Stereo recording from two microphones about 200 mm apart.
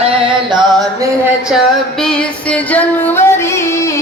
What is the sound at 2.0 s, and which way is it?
Music, 5° left (ahead or behind).